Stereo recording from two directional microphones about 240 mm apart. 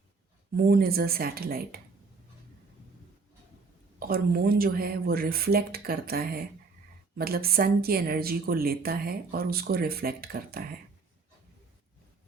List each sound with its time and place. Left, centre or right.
0.5 s speech: right
4.0 s speech: right